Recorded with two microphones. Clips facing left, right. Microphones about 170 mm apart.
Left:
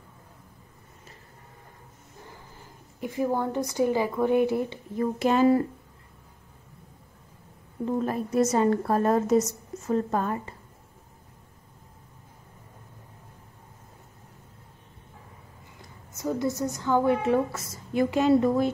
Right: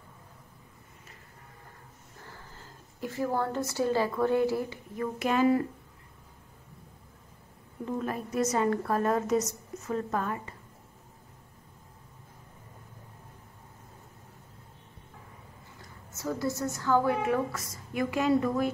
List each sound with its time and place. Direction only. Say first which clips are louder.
2.1 s a woman's voice: left 2 dB; 15° left (ahead or behind); by 5.6 s 30° left (ahead or behind)
7.8 s a woman's voice: left 5 dB; 30° left (ahead or behind)
16.2 s a woman's voice: left 4 dB; 20° left (ahead or behind)